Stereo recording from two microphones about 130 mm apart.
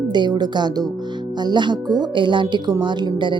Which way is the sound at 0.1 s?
35° right (ahead or behind).